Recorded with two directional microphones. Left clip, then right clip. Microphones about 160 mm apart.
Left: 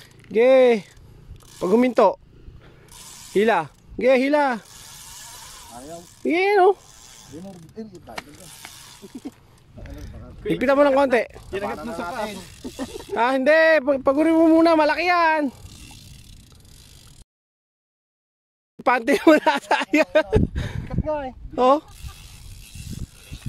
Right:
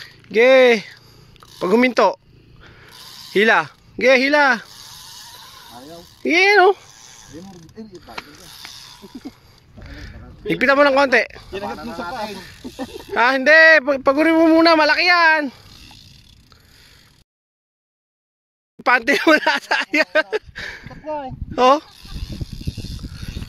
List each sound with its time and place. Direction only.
0.0 s speech: 5° left (ahead or behind)
3.3 s speech: 5° left (ahead or behind)
5.7 s speech: 5° left (ahead or behind)
9.8 s a sound: 10° left (ahead or behind)
10.5 s speech: 10° left (ahead or behind)
12.6 s speech: 30° right (ahead or behind)
12.9 s speech: 5° left (ahead or behind)
18.8 s speech: 5° left (ahead or behind)